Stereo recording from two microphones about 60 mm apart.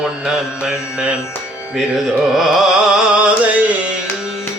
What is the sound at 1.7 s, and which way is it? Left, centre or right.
Music, centre.